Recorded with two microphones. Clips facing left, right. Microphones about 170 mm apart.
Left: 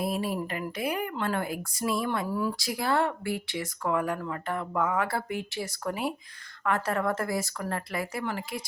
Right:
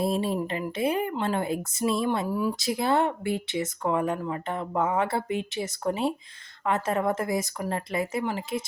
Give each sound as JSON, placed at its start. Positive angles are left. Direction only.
{"t": 0.0, "sound": "speech", "side_deg": -25}